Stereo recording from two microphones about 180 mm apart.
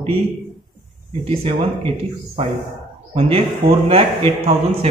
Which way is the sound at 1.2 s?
35° right (ahead or behind).